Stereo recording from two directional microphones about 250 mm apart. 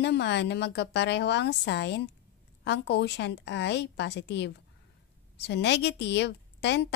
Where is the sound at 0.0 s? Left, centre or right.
Left.